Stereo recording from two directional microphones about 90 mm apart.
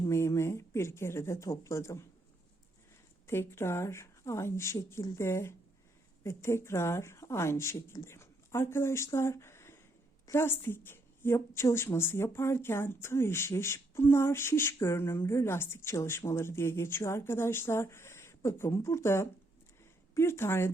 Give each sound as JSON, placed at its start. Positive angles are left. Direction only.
{"t": 0.1, "sound": "speech", "side_deg": 30}
{"t": 3.2, "sound": "a woman's voice", "side_deg": 30}
{"t": 9.1, "sound": "a sound", "side_deg": 30}
{"t": 10.3, "sound": "a woman's voice", "side_deg": 25}